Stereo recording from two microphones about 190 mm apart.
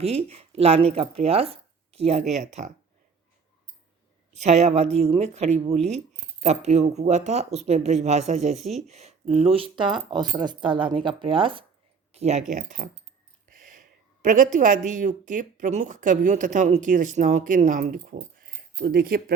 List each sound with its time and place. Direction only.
0.0 s speech: 35° right (ahead or behind)
4.4 s speech: 35° right (ahead or behind); by 19.2 s 50° right (ahead or behind)